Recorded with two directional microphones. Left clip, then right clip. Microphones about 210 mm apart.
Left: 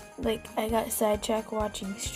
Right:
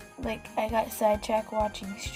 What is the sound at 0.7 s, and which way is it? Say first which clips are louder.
Speech: right 1 dB; 25° left (ahead or behind).